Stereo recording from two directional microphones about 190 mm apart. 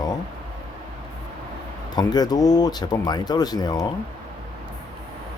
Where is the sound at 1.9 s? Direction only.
20° left (ahead or behind).